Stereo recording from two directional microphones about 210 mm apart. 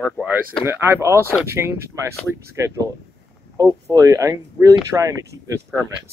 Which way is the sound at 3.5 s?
15° right (ahead or behind).